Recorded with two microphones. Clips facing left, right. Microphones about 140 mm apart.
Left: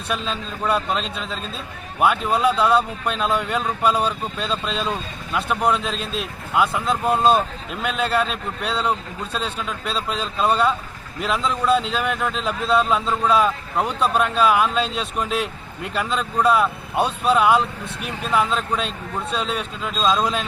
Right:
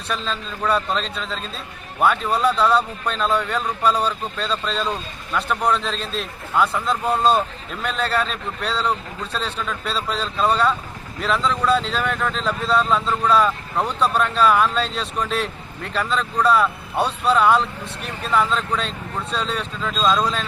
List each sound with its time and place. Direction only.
0.1 s speech: 10° left (ahead or behind)